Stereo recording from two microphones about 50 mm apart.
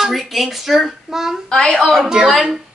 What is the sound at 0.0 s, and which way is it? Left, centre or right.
A woman's voice, centre.